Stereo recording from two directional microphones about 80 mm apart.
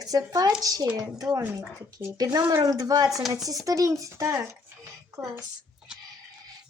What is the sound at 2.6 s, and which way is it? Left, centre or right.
Speech, right.